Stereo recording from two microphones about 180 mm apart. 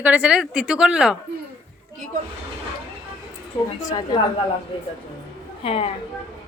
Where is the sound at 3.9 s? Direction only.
25° left (ahead or behind).